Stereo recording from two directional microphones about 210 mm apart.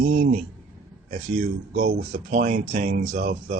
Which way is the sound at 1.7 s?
40° right (ahead or behind).